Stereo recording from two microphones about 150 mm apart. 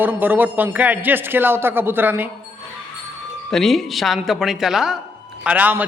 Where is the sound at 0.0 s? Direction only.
10° right (ahead or behind).